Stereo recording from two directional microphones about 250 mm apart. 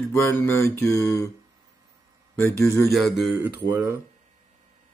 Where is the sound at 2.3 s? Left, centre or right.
Centre.